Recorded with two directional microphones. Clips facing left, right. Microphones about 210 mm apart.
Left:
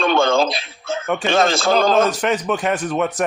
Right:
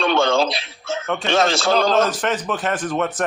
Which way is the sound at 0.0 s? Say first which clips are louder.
Left 1 dB; 50° left (ahead or behind).